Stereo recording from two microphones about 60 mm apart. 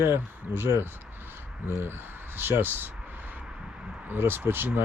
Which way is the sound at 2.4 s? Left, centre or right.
Right.